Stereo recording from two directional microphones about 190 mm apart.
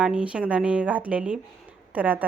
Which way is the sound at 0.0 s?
5° right (ahead or behind).